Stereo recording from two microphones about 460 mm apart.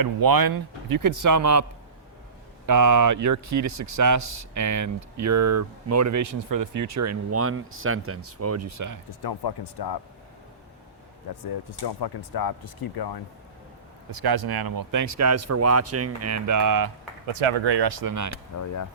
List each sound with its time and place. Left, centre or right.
0.0 s speech: right
2.6 s speech: right
9.2 s speech: left
11.8 s speech: left
14.1 s speech: right
17.2 s speech: right
18.5 s speech: left